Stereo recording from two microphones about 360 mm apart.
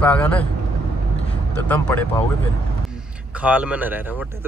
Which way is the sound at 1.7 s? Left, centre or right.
Centre.